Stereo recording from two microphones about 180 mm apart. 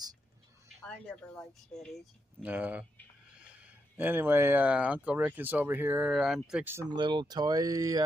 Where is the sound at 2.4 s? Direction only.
10° right (ahead or behind).